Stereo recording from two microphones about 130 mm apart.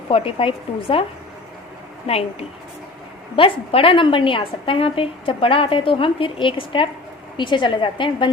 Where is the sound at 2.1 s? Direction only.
50° left (ahead or behind).